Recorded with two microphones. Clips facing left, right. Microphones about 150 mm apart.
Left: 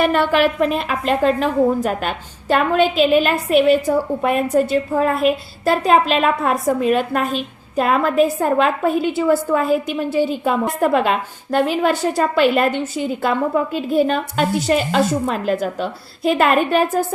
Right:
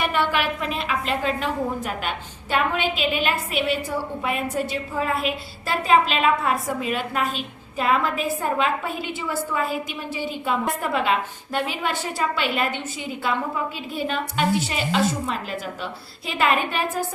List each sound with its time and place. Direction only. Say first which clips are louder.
0.0 s a woman's voice: left 8 dB; 45° left (ahead or behind)